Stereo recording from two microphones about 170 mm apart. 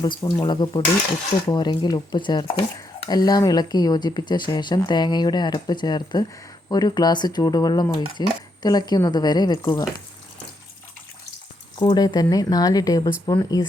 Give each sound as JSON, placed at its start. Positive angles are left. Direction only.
{"t": 0.0, "sound": "speech", "side_deg": 25}
{"t": 11.9, "sound": "speech", "side_deg": 25}